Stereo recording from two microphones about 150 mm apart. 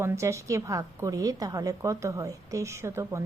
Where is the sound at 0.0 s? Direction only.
15° right (ahead or behind).